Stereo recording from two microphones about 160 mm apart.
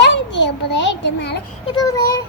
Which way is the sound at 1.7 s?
20° left (ahead or behind).